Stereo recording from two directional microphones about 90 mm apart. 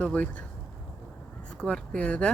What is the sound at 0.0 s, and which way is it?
Speech, 15° left (ahead or behind).